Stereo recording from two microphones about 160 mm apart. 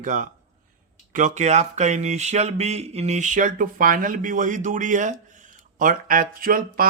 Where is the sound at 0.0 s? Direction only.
55° right (ahead or behind).